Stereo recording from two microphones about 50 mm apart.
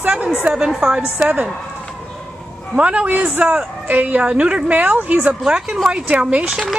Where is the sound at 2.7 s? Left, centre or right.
Right.